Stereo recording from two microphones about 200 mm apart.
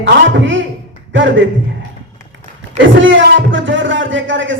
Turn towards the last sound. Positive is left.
turn(degrees=-70)  # may be behind; listen again after turning